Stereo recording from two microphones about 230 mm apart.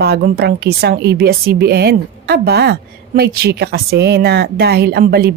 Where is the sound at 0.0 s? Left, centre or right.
Right.